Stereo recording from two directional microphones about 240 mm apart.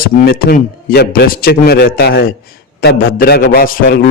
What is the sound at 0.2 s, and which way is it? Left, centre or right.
A man's voice, left.